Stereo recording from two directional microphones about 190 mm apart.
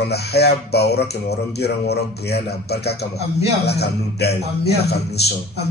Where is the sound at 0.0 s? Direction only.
60° left (ahead or behind).